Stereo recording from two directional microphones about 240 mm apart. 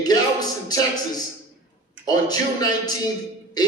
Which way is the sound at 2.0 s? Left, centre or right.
Centre.